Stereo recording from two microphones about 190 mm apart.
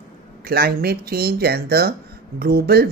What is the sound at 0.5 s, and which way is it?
Speech, 55° right (ahead or behind).